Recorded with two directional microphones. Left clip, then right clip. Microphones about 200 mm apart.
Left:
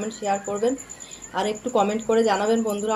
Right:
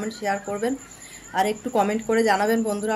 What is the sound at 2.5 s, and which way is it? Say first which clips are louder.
Speech: left 1 dB; 40° right (ahead or behind).